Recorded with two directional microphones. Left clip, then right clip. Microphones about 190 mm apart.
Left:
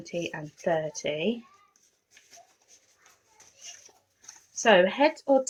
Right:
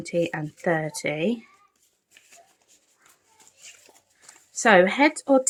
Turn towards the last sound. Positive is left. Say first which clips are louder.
# right 3 dB
turn(degrees=-40)  # may be behind; listen again after turning